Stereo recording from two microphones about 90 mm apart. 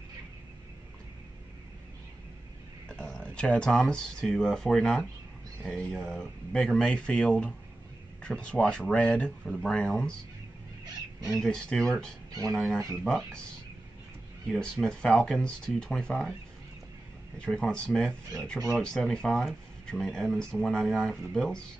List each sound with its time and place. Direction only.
2.9 s speech: 10° left (ahead or behind)
11.2 s speech: centre (ahead or behind)
12.3 s speech: 45° right (ahead or behind)
12.5 s speech: centre (ahead or behind)
14.5 s speech: 10° left (ahead or behind)
17.4 s speech: 10° left (ahead or behind)